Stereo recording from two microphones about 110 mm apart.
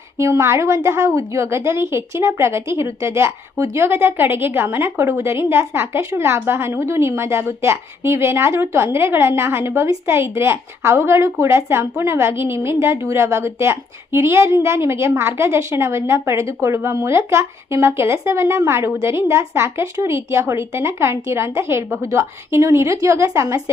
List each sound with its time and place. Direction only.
0.2 s speech: 25° right (ahead or behind)